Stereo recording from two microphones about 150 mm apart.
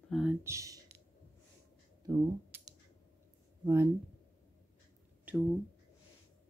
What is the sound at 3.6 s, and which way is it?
Speech, 15° right (ahead or behind).